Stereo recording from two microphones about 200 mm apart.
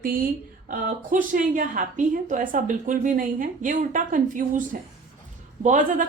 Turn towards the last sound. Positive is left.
turn(degrees=-40)  # may be behind; listen again after turning